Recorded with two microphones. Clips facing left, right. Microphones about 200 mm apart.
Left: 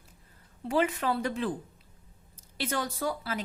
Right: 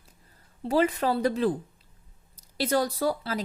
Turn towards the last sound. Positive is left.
turn(degrees=-35)  # may be behind; listen again after turning